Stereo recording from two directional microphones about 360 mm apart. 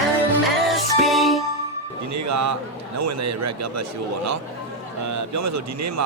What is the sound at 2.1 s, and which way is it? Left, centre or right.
Music, right.